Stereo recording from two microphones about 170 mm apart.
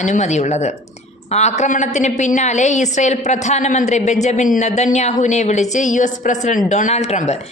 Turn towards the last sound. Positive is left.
turn(degrees=40)  # may be behind; listen again after turning